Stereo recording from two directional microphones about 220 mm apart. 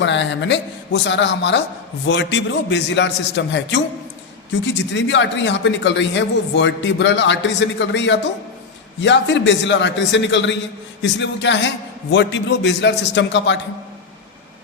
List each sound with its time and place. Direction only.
0.0 s a man's voice: 55° left (ahead or behind)